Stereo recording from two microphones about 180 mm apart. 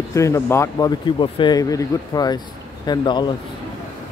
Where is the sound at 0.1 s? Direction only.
15° left (ahead or behind).